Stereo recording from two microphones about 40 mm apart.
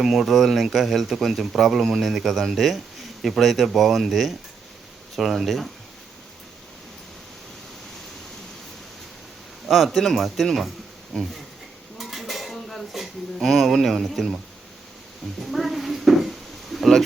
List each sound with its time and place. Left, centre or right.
0.0 s speech: centre
9.6 s speech: centre
11.9 s dishes: centre
12.9 s speech: centre
15.4 s a sound: centre